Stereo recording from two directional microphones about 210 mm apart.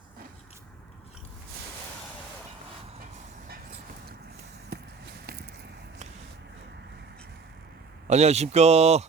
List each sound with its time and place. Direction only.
4.7 s run: 50° right (ahead or behind)
5.2 s a sound: 45° right (ahead or behind)
8.0 s a man's voice: 30° right (ahead or behind)